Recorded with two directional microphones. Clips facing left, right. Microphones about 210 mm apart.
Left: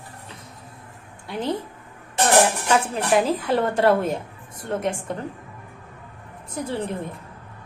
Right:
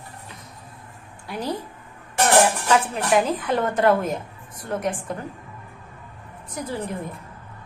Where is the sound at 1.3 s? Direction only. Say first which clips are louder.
Left 2 dB; 25° left (ahead or behind).